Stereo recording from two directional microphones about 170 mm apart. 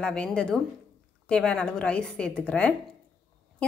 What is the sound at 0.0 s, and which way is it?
A woman's voice, 5° left (ahead or behind).